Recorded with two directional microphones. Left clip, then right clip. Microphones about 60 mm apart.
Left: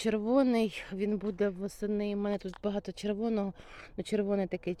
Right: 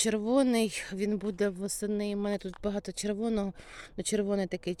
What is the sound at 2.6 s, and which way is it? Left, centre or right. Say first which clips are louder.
Speech: right 1 dB; right.